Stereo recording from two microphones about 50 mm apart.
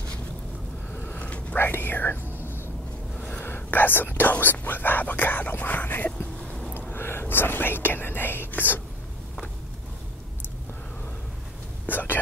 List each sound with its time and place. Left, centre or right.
0.9 s a sound: left
1.6 s whispering: left
3.2 s a sound: left
3.4 s whispering: left
6.9 s whispering: left
11.9 s whispering: left